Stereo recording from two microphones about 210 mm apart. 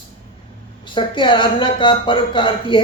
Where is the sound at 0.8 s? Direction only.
25° left (ahead or behind).